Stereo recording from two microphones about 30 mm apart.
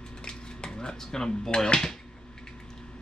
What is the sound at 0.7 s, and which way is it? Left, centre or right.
Speech, left.